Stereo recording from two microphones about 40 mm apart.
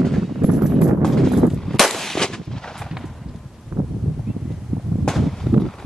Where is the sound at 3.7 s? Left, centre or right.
Right.